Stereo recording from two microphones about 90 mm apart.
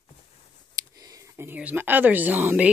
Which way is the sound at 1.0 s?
40° right (ahead or behind).